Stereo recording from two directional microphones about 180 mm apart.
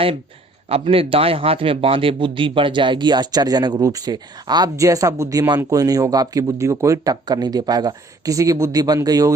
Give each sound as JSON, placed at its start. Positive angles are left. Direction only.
{"t": 0.7, "sound": "a man's voice", "side_deg": -30}